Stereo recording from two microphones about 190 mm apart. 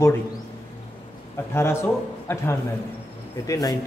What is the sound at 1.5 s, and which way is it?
Speech, 15° left (ahead or behind).